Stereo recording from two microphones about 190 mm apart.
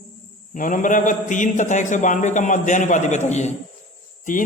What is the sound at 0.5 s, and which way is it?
A man's voice, 45° left (ahead or behind).